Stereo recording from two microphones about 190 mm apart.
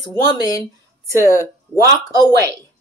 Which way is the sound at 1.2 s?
45° left (ahead or behind).